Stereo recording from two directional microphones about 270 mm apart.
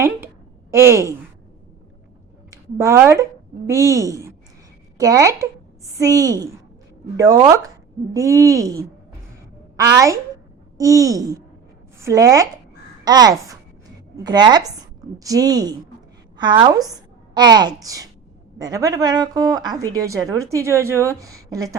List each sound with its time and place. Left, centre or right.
0.7 s a woman's voice: centre
2.5 s a woman's voice: centre